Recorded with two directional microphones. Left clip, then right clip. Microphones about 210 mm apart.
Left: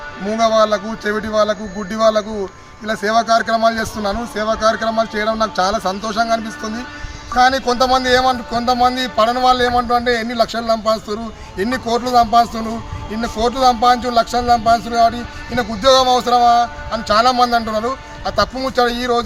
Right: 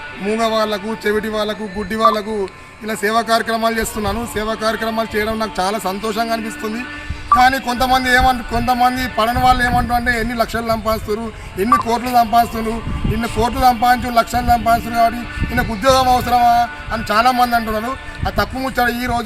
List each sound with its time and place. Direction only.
0.3 s speech: 10° left (ahead or behind)